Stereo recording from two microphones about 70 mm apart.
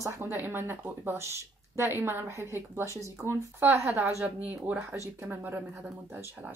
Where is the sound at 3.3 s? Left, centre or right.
Right.